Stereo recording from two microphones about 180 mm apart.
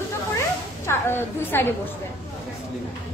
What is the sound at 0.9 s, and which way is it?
Speech, 15° left (ahead or behind).